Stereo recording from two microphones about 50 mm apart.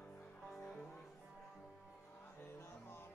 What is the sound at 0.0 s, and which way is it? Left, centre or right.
Music, left.